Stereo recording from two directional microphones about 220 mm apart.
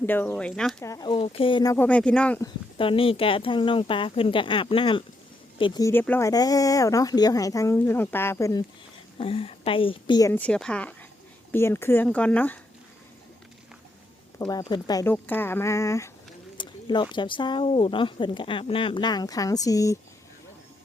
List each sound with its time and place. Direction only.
0.0 s speech: 10° left (ahead or behind)
0.8 s speech: 15° left (ahead or behind)
2.7 s speech: 25° left (ahead or behind)
9.1 s speech: 25° left (ahead or behind); by 12.5 s 5° left (ahead or behind)
14.3 s speech: 15° left (ahead or behind)